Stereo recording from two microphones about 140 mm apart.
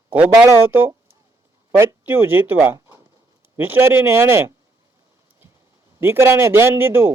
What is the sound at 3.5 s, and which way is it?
A man's voice, 15° right (ahead or behind).